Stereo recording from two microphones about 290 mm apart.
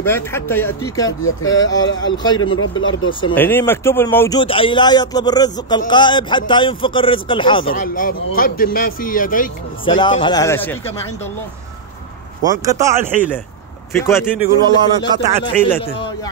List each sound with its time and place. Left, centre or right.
0.0 s speech: centre
1.2 s speech: left
1.6 s speech: centre
2.4 s speech: left
3.1 s speech: centre
7.6 s speech: left
9.8 s speech: centre
12.4 s speech: centre
13.9 s speech: centre
14.4 s speech: centre
15.0 s speech: centre